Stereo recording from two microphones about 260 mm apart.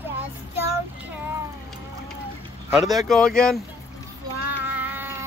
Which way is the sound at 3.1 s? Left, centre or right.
Centre.